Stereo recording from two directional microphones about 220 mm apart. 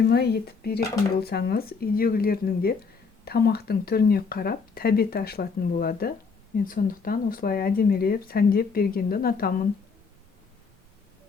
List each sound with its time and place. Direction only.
0.0 s speech: 45° left (ahead or behind)